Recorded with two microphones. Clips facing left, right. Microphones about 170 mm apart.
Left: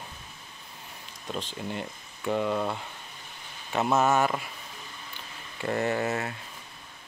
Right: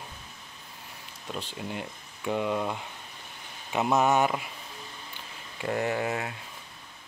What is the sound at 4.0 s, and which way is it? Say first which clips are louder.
Speech: right 1 dB; 15° right (ahead or behind).